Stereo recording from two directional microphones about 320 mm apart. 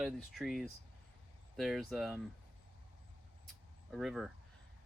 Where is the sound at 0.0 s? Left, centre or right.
Centre.